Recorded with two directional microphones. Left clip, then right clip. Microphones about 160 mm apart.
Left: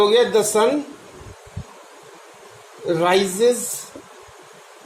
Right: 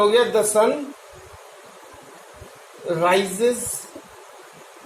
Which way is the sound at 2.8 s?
90° left.